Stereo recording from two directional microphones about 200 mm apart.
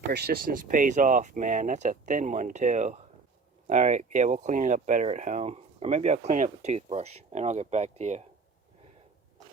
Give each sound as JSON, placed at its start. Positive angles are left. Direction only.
{"t": 0.1, "sound": "speech", "side_deg": -55}